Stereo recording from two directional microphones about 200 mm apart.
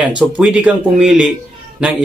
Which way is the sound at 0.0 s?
5° right (ahead or behind).